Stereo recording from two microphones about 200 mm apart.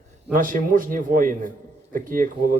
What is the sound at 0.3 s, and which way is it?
A man's voice, 40° right (ahead or behind).